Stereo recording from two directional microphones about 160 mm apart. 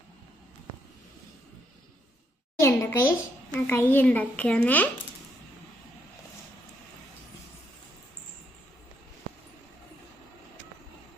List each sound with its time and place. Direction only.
2.6 s a child's voice: 20° left (ahead or behind)